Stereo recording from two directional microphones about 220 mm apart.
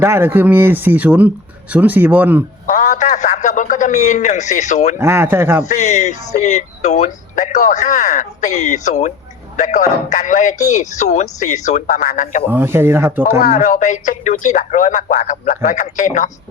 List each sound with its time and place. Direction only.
0.0 s speech: 10° right (ahead or behind)
2.7 s a man's voice: 40° left (ahead or behind)
4.9 s speech: 10° right (ahead or behind)
5.6 s speech: 30° left (ahead or behind)
12.5 s speech: 10° right (ahead or behind)
13.4 s speech: 35° left (ahead or behind)